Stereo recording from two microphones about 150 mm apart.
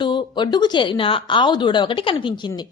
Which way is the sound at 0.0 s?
30° left (ahead or behind).